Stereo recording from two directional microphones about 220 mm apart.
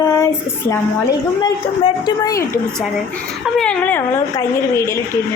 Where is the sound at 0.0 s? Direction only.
10° left (ahead or behind).